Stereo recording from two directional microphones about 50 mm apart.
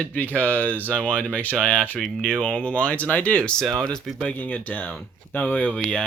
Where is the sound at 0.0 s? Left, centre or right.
Left.